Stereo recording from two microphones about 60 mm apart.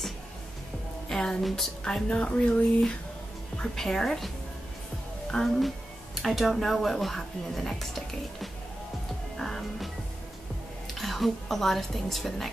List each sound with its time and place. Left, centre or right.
1.0 s a woman's voice: centre
5.3 s speech: centre
9.4 s music: centre
11.0 s speech: centre